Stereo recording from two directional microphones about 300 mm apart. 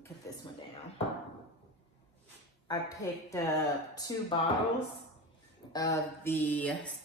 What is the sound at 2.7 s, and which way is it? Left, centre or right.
Speech, centre.